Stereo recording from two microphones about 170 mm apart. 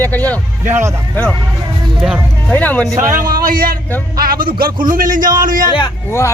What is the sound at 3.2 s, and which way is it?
A man's voice, 55° right (ahead or behind).